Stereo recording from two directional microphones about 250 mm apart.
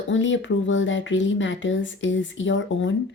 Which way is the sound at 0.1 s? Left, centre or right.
Left.